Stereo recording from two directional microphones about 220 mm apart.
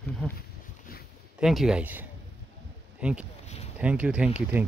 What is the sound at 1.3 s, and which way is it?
Speech, centre (ahead or behind).